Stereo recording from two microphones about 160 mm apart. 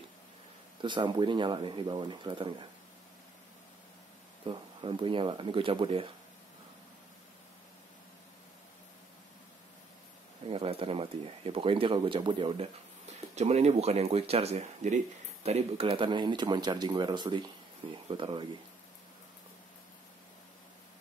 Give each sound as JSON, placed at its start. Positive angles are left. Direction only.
{"t": 0.7, "sound": "speech", "side_deg": -30}
{"t": 4.5, "sound": "speech", "side_deg": -30}
{"t": 10.5, "sound": "speech", "side_deg": -35}
{"t": 13.3, "sound": "speech", "side_deg": -45}